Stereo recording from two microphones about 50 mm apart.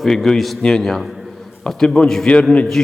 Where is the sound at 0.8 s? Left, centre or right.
Centre.